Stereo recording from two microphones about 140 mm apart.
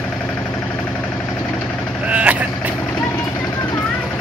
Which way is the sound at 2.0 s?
10° right (ahead or behind).